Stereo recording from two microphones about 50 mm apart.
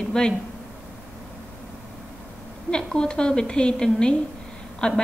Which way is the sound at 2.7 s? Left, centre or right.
Centre.